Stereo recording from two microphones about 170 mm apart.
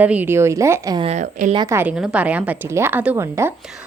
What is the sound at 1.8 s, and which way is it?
A woman's voice, 5° right (ahead or behind).